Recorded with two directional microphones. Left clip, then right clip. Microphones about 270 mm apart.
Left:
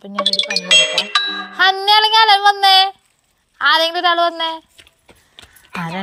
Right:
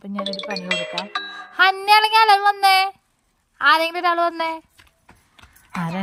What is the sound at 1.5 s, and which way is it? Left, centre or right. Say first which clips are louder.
Child singing: left 2 dB; right.